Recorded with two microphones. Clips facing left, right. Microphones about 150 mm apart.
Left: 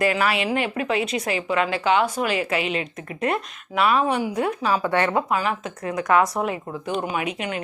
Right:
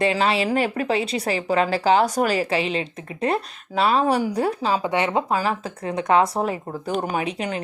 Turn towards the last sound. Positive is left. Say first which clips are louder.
# right 1 dB
turn(degrees=-35)  # may be behind; listen again after turning